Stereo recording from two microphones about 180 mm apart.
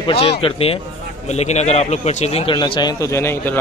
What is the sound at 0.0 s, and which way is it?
A man's voice, 35° left (ahead or behind).